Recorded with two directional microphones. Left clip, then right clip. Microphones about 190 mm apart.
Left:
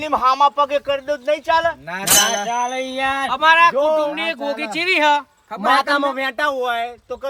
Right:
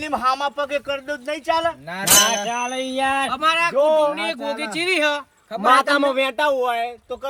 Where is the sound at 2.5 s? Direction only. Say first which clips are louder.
Left 4 dB; 15° right (ahead or behind).